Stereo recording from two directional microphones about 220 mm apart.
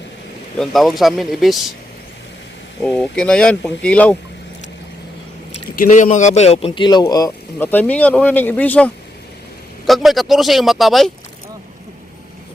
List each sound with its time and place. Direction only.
0.6 s speech: centre (ahead or behind)
2.8 s speech: 5° left (ahead or behind)
5.8 s speech: 35° left (ahead or behind); by 11.1 s centre (ahead or behind)